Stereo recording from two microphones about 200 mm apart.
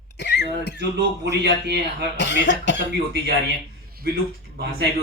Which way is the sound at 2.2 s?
60° left (ahead or behind).